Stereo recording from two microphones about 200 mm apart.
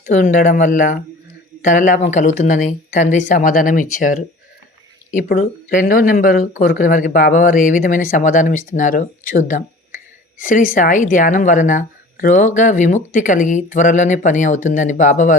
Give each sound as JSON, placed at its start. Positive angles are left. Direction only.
{"t": 0.0, "sound": "speech", "side_deg": 40}